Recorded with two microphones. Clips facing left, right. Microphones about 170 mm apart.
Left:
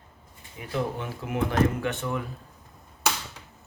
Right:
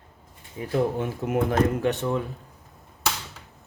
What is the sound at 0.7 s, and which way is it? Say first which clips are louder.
Speech: right 5 dB; 45° right (ahead or behind).